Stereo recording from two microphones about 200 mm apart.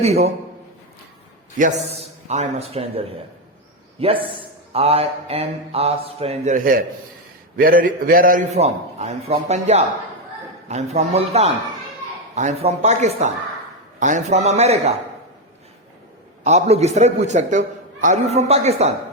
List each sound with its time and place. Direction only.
0.0 s speech: 30° right (ahead or behind)
2.2 s speech: 35° right (ahead or behind)
4.0 s speech: 25° right (ahead or behind)
16.4 s speech: 35° right (ahead or behind)